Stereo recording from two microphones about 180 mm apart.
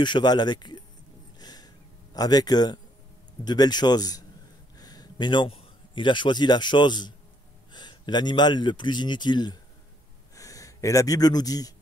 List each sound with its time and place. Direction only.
0.0 s speech: 25° left (ahead or behind)
1.4 s a sound: 20° left (ahead or behind)
2.1 s a man's voice: 20° left (ahead or behind)